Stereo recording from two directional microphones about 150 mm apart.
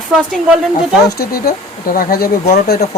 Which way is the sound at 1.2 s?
90° left.